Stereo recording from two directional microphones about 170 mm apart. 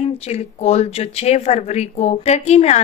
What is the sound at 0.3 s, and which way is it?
Speech, 40° left (ahead or behind).